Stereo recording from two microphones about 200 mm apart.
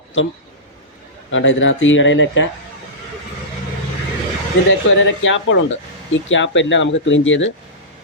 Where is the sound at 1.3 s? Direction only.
70° left (ahead or behind).